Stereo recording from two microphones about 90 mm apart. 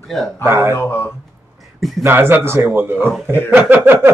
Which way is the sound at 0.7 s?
25° left (ahead or behind).